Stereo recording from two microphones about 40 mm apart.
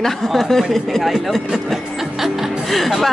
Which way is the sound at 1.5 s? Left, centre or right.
Centre.